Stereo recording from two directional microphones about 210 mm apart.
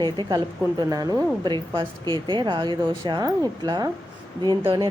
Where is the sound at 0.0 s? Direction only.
20° right (ahead or behind).